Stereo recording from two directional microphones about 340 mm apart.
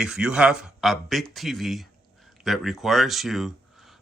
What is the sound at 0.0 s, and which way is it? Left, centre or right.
Speech, centre.